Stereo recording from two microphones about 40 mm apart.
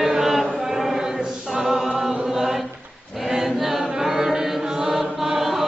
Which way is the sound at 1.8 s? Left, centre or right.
Centre.